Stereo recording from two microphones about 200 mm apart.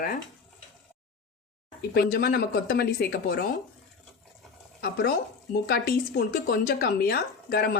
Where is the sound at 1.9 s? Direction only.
50° left (ahead or behind).